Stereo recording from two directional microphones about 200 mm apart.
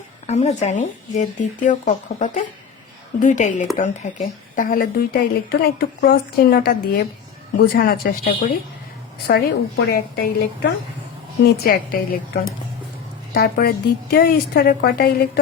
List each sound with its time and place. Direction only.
0.3 s a woman's voice: 35° left (ahead or behind); by 15.3 s 50° left (ahead or behind)